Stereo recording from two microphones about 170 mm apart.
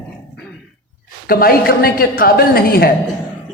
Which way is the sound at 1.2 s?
60° left (ahead or behind).